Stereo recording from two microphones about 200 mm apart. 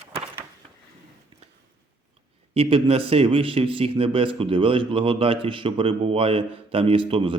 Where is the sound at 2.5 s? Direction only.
30° right (ahead or behind).